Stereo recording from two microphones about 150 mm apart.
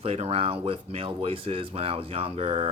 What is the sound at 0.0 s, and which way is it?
Speech, 45° right (ahead or behind).